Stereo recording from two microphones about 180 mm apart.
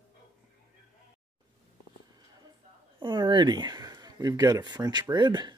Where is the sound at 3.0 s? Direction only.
25° right (ahead or behind).